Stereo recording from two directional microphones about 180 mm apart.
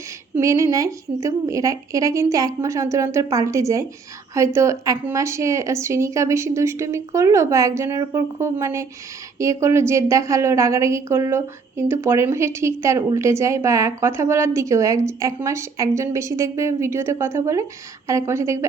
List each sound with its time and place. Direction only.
0.3 s a woman's voice: 15° right (ahead or behind)